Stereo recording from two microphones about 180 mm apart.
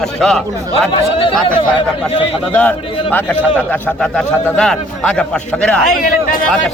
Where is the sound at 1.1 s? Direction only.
30° left (ahead or behind).